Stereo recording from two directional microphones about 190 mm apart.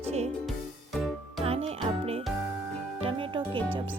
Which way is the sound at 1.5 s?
30° right (ahead or behind).